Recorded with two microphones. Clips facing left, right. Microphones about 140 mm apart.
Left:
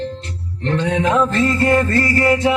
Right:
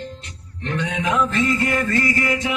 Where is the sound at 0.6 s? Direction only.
35° left (ahead or behind).